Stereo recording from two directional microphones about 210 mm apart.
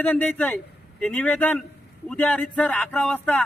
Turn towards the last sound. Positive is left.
turn(degrees=5)  # may be behind; listen again after turning